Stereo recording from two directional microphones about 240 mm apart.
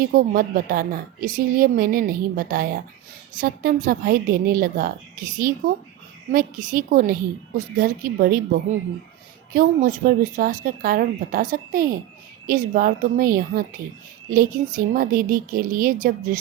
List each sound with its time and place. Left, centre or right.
0.1 s a woman's voice: right
6.3 s a woman's voice: right
9.5 s a woman's voice: right